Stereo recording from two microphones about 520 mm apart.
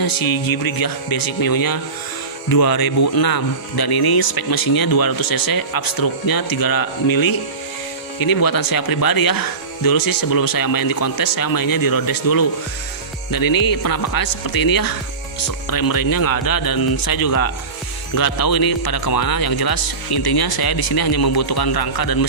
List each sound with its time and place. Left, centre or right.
0.0 s speech: left